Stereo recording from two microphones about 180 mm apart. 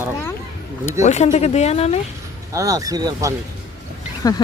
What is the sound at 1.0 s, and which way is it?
Speech, 40° left (ahead or behind).